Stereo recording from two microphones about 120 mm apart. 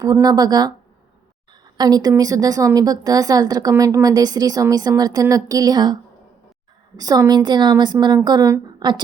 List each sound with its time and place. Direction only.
0.0 s a woman's voice: 30° right (ahead or behind)